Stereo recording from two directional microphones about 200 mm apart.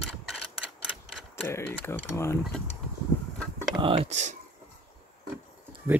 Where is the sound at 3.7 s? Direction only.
30° right (ahead or behind).